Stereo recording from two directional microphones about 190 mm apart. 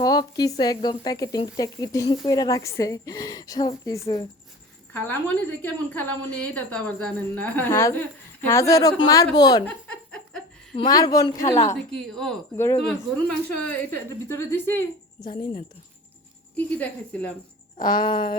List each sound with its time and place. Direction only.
0.0 s a woman's voice: 20° left (ahead or behind)
9.6 s laughter: 5° left (ahead or behind)
10.8 s a woman's voice: 20° left (ahead or behind)
11.9 s speech: centre (ahead or behind)
12.5 s a woman's voice: 15° left (ahead or behind)
16.6 s a woman's voice: 10° left (ahead or behind)
17.7 s a woman's voice: 20° left (ahead or behind)